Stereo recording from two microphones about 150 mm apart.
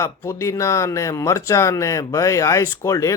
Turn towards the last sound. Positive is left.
turn(degrees=20)  # may be behind; listen again after turning